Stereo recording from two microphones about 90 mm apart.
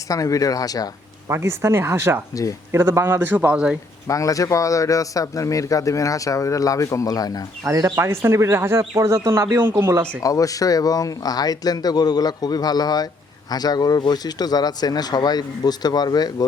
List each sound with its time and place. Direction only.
0.1 s a man's voice: 40° left (ahead or behind)
1.3 s speech: 30° right (ahead or behind)
2.3 s a man's voice: 40° left (ahead or behind)
2.7 s speech: 25° right (ahead or behind)
4.0 s a man's voice: 40° left (ahead or behind)
7.7 s speech: 35° right (ahead or behind)
10.2 s speech: 40° left (ahead or behind)